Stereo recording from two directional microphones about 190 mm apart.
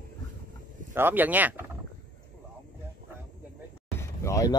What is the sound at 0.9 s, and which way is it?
Speech, 10° right (ahead or behind).